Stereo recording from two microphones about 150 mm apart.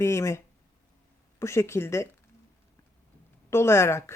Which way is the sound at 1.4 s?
20° left (ahead or behind).